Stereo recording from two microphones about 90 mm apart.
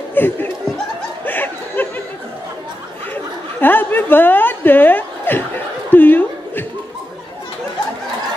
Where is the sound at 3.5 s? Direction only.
20° left (ahead or behind).